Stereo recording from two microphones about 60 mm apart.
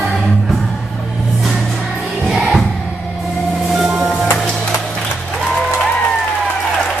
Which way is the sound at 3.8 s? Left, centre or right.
Centre.